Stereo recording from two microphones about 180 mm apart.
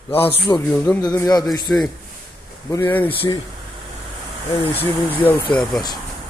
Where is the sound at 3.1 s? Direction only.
30° left (ahead or behind).